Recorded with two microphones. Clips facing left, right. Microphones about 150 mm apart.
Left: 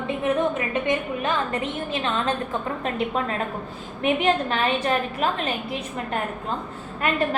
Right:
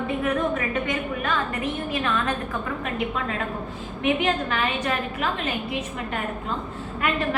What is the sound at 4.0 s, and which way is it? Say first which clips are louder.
A woman's voice: left 2 dB; 35° left (ahead or behind).